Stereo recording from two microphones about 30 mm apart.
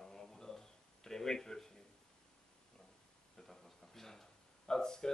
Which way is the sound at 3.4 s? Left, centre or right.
Centre.